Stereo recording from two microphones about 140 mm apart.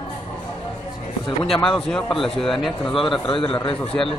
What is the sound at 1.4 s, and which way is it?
Speech, centre (ahead or behind).